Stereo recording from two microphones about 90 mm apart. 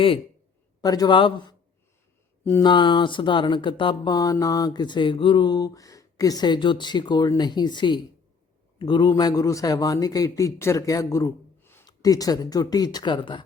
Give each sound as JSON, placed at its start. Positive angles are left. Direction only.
{"t": 0.8, "sound": "speech", "side_deg": 45}
{"t": 1.1, "sound": "speech", "side_deg": 65}
{"t": 2.6, "sound": "speech", "side_deg": 60}
{"t": 4.1, "sound": "speech", "side_deg": 45}
{"t": 11.9, "sound": "speech", "side_deg": 40}